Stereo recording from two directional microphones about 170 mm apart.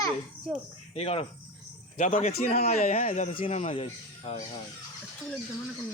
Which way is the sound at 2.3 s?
60° left (ahead or behind).